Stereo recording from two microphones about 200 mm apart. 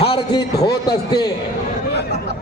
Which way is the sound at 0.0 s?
25° left (ahead or behind).